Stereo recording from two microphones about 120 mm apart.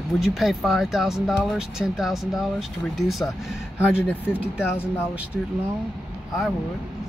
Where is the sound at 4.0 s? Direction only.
15° left (ahead or behind).